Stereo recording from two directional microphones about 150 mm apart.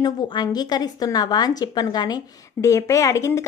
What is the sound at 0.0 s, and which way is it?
A woman's voice, 25° left (ahead or behind).